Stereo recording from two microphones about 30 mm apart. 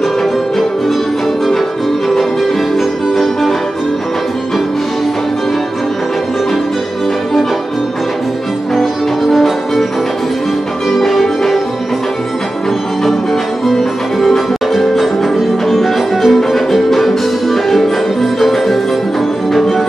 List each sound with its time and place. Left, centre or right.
8.7 s music: centre
10.9 s change ringing: centre
13.7 s music: centre
14.7 s music: centre